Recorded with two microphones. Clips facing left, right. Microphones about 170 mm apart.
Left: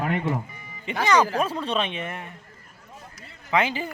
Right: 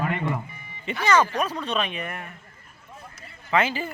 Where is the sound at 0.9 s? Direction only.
15° left (ahead or behind).